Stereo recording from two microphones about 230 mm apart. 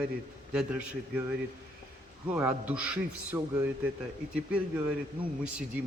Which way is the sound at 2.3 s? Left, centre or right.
Centre.